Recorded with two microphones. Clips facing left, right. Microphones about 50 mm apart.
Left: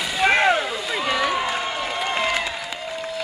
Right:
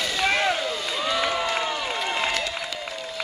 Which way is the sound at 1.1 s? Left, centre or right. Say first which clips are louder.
Left 3 dB; left.